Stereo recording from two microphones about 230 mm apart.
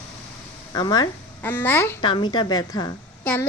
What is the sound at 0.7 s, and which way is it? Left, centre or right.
A woman's voice, centre.